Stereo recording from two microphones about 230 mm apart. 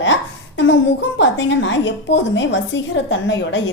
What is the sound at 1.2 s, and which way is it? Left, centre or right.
A woman's voice, left.